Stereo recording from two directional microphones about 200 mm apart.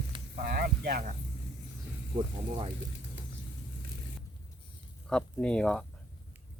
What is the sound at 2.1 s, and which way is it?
Speech, 40° right (ahead or behind).